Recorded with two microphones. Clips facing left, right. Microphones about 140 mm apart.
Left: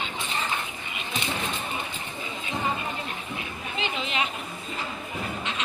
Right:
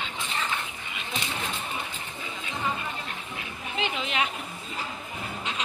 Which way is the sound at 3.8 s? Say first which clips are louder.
Right 1 dB; 60° right (ahead or behind).